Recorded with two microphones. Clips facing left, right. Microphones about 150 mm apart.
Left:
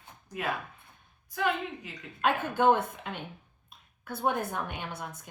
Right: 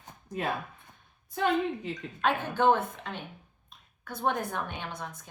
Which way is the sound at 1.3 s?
25° right (ahead or behind).